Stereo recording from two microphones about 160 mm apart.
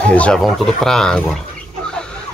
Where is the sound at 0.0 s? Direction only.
10° left (ahead or behind).